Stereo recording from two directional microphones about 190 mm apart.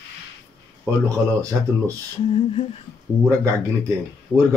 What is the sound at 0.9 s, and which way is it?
Speech, 10° right (ahead or behind).